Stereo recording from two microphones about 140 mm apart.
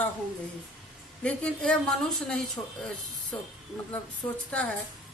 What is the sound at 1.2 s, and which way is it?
A woman's voice, 10° left (ahead or behind).